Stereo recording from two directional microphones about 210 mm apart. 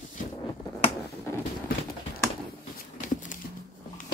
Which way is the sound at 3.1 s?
40° left (ahead or behind).